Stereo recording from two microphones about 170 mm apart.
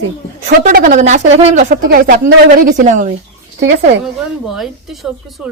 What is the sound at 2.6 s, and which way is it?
Speech, 50° right (ahead or behind).